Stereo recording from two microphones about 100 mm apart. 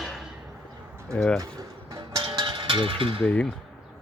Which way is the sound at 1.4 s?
40° right (ahead or behind).